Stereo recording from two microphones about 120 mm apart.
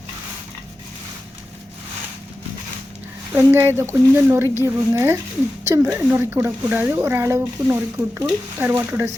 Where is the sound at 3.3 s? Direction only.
20° right (ahead or behind).